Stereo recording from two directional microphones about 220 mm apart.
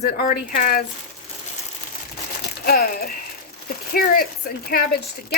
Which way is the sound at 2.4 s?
45° left (ahead or behind).